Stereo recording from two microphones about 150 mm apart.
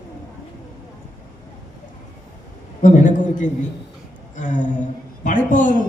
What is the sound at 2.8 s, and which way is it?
A man's voice, 60° left (ahead or behind).